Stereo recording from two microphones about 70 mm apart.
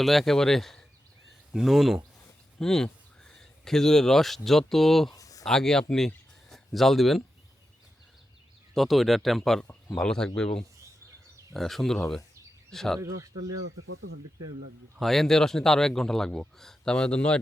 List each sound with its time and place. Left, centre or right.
0.0 s speech: centre
2.6 s a sound: centre
4.4 s speech: centre
5.1 s a sound: left
5.5 s a man's voice: centre
8.7 s a man's voice: centre
11.5 s a man's voice: centre
13.0 s speech: right
14.9 s a man's voice: centre